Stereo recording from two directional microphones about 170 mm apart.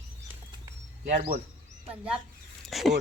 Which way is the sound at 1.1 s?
55° right (ahead or behind).